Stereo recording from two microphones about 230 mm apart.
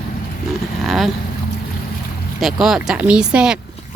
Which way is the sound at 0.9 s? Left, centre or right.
Centre.